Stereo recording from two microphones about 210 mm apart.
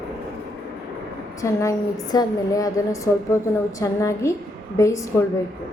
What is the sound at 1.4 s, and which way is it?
A woman's voice, 15° left (ahead or behind).